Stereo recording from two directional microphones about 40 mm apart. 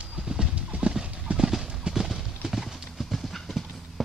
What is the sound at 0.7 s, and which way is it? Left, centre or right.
Clip-clop, right.